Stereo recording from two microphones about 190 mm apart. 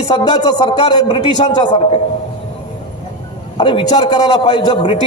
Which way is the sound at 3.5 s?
25° left (ahead or behind).